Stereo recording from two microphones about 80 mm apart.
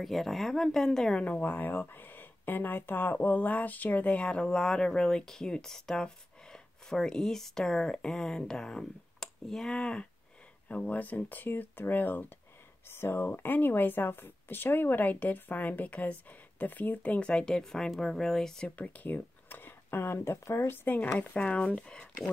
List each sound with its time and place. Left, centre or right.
0.0 s speech: centre
1.2 s speech: left; by 18.7 s centre
18.8 s speech: left